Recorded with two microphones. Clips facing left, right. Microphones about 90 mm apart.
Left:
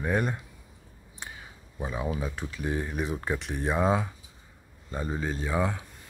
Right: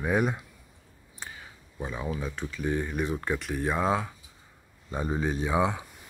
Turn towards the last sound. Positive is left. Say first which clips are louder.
# right 2 dB
turn(degrees=-10)  # may be behind; listen again after turning